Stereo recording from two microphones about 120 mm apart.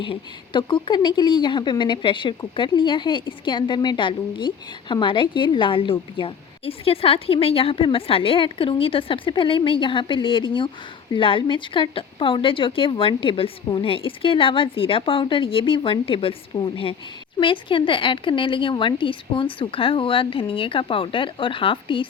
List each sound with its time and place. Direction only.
0.0 s speech: 45° left (ahead or behind)